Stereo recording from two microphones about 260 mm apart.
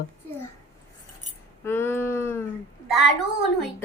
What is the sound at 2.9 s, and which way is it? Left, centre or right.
Speech, centre.